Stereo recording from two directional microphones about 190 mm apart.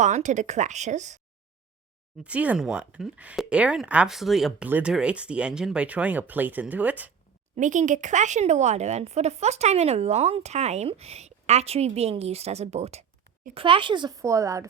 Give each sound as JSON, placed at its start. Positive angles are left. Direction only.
{"t": 0.0, "sound": "speech", "side_deg": -40}
{"t": 2.2, "sound": "speech", "side_deg": -5}
{"t": 7.5, "sound": "speech", "side_deg": -40}